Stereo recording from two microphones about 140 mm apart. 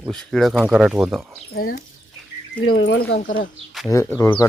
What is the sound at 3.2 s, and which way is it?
Speech, 70° left (ahead or behind).